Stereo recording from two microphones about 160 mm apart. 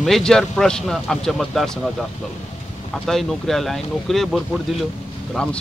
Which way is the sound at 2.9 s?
Centre (ahead or behind).